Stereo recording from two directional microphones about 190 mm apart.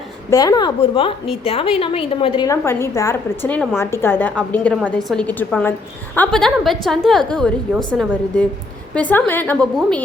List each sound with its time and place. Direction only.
0.3 s a woman's voice: 20° left (ahead or behind)
2.5 s a woman's voice: 15° left (ahead or behind)